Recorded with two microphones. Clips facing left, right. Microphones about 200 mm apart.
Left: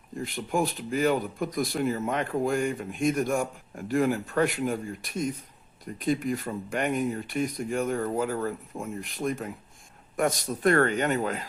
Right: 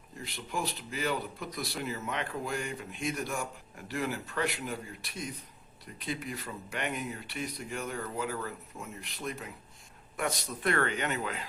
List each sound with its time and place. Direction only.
0.3 s speech: 50° left (ahead or behind)